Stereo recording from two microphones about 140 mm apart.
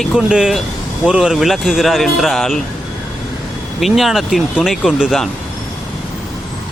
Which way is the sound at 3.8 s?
Centre (ahead or behind).